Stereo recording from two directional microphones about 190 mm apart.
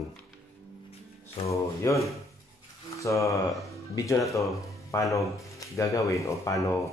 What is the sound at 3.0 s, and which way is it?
Speech, 15° left (ahead or behind).